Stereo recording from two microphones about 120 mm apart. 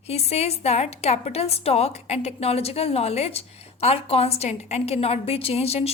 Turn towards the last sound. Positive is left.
turn(degrees=60)  # may be behind; listen again after turning